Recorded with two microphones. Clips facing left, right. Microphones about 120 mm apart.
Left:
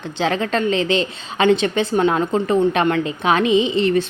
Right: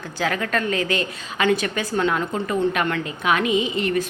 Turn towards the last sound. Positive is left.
turn(degrees=30)  # may be behind; listen again after turning